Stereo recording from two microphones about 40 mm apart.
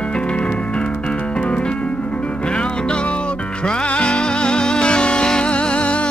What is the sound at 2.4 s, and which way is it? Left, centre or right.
Music, left.